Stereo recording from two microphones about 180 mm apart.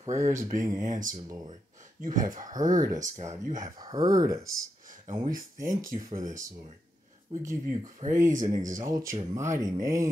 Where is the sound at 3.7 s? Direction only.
20° right (ahead or behind).